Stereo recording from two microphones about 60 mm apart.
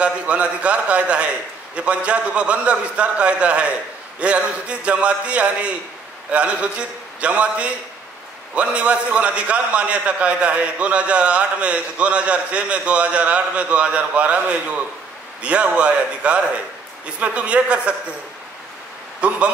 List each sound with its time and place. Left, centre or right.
0.0 s a man's voice: right
19.2 s a man's voice: right